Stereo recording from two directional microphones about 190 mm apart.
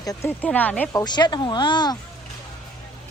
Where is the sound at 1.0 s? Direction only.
20° left (ahead or behind).